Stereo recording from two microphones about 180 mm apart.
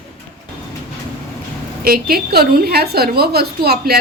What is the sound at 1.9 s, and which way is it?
A woman's voice, 60° right (ahead or behind).